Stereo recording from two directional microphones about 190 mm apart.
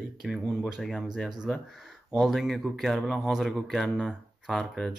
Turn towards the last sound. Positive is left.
turn(degrees=0)  # may be behind; listen again after turning